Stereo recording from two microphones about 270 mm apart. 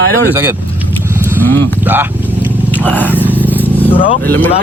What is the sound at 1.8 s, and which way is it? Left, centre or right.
Vehicle, centre.